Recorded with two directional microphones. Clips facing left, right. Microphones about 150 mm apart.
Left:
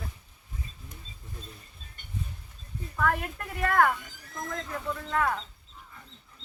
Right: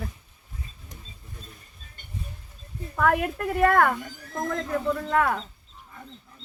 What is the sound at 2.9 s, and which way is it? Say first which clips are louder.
Speech: right 6 dB; 55° right (ahead or behind).